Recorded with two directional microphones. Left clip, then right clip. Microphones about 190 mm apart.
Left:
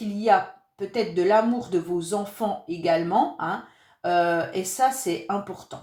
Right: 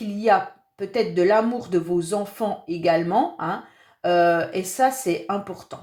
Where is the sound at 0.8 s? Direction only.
35° right (ahead or behind).